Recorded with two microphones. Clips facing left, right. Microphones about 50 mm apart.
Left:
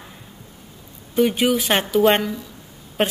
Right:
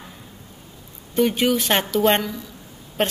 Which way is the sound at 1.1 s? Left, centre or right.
Centre.